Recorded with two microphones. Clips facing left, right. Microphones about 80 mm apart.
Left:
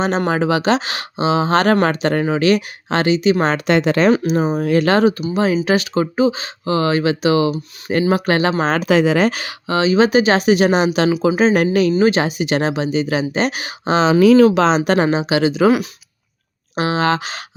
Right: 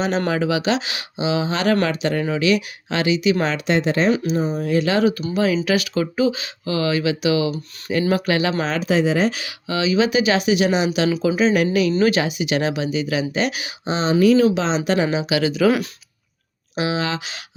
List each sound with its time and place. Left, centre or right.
0.3 s speech: left
3.7 s speech: left
5.3 s speech: left
8.8 s speech: left
9.4 s speech: left
11.9 s speech: left
13.8 s speech: left
15.3 s speech: left
16.7 s speech: left